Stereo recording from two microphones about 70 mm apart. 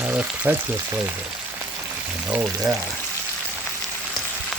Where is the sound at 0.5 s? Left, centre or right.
Right.